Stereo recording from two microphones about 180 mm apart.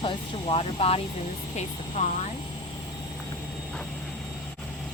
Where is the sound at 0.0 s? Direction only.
30° left (ahead or behind).